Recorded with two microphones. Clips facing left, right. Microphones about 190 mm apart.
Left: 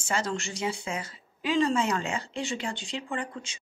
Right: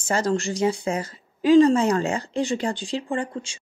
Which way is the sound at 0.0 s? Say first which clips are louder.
Right 7 dB; 40° right (ahead or behind).